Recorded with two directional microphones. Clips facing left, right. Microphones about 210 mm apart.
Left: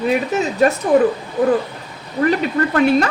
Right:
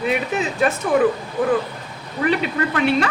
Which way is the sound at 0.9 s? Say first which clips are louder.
Left 3 dB; 35° left (ahead or behind).